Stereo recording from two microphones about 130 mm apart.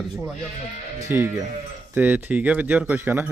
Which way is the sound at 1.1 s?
20° right (ahead or behind).